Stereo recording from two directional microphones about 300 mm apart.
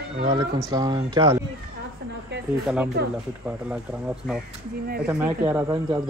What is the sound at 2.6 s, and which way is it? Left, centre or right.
Speech, centre.